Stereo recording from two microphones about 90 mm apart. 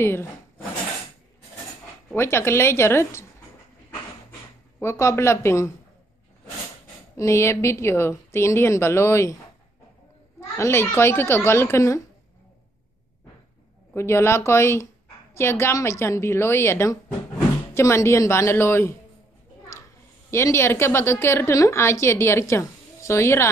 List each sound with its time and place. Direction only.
0.0 s a woman's voice: 25° left (ahead or behind)
2.1 s a woman's voice: 25° left (ahead or behind)
4.7 s a woman's voice: 30° left (ahead or behind)
7.2 s a woman's voice: 30° left (ahead or behind)
10.6 s a woman's voice: 30° left (ahead or behind)
13.9 s a woman's voice: 30° left (ahead or behind)
20.2 s a woman's voice: 30° left (ahead or behind)